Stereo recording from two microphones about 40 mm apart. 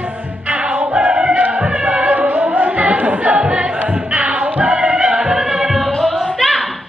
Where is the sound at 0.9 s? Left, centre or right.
Right.